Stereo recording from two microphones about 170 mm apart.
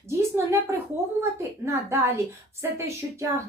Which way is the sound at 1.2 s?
15° right (ahead or behind).